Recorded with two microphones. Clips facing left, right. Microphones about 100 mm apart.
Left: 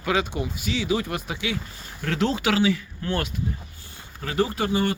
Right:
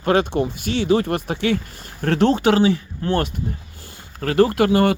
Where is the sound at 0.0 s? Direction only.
50° right (ahead or behind).